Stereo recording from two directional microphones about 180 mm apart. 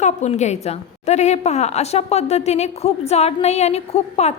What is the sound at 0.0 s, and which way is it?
A woman's voice, 40° left (ahead or behind).